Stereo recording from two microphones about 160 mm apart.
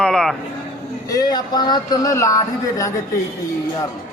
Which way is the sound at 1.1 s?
25° left (ahead or behind).